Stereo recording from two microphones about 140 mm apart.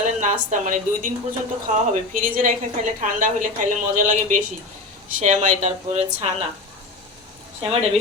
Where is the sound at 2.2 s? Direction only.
80° right; by 6.3 s 50° right (ahead or behind).